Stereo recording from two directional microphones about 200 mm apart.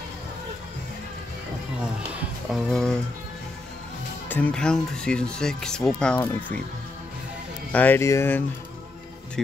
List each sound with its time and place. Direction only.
2.5 s speech: 5° left (ahead or behind)
4.3 s speech: 5° left (ahead or behind)
7.7 s speech: 10° left (ahead or behind)